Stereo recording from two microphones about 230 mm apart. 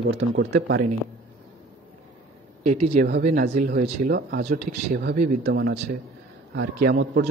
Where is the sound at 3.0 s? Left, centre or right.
Right.